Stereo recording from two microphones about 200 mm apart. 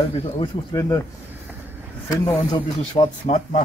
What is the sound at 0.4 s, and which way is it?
Speech, 15° left (ahead or behind).